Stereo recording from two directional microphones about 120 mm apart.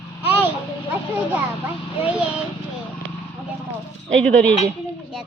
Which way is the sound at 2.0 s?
10° right (ahead or behind).